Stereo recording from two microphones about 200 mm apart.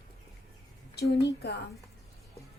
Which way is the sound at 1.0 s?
55° left (ahead or behind).